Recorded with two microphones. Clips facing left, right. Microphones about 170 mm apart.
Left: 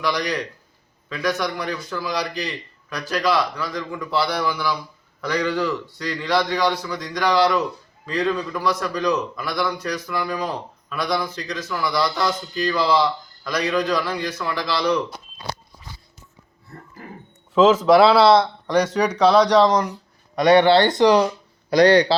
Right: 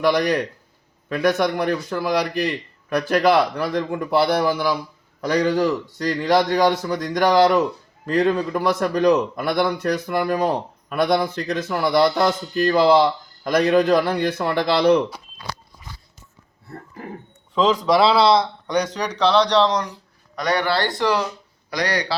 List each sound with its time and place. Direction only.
0.0 s a man's voice: 50° right (ahead or behind)
17.5 s speech: 5° left (ahead or behind)
20.3 s speech: 25° left (ahead or behind)